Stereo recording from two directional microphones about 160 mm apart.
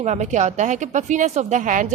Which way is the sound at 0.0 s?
45° right (ahead or behind).